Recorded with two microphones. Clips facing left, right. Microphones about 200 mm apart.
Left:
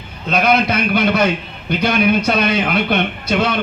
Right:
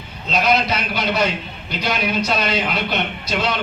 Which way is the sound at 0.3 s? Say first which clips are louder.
Left 3 dB; 55° left (ahead or behind).